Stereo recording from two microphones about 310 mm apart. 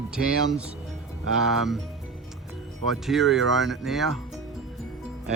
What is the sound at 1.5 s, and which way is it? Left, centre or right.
Speech, centre.